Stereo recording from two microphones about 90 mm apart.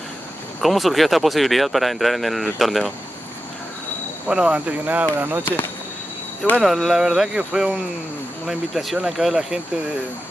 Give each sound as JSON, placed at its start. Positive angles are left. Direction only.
{"t": 0.6, "sound": "speech", "side_deg": 0}
{"t": 4.3, "sound": "speech", "side_deg": -10}
{"t": 6.6, "sound": "speech", "side_deg": 0}